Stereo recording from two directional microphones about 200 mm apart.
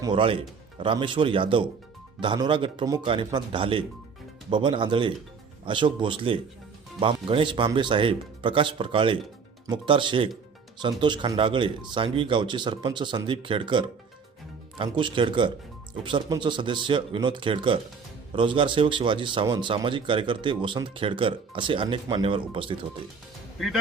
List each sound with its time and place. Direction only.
0.0 s speech: 25° right (ahead or behind)